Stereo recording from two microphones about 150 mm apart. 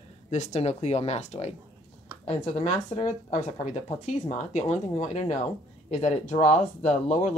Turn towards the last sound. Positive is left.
turn(degrees=50)  # may be behind; listen again after turning